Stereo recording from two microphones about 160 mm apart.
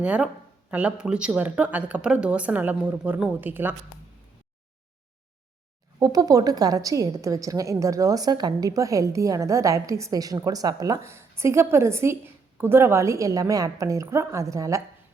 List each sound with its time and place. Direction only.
0.0 s speech: 10° right (ahead or behind)
6.0 s a woman's voice: 20° right (ahead or behind)